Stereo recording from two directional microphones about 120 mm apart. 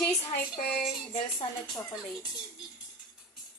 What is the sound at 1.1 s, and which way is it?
Speech, 40° left (ahead or behind).